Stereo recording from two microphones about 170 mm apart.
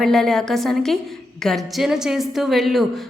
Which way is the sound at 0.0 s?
Centre (ahead or behind).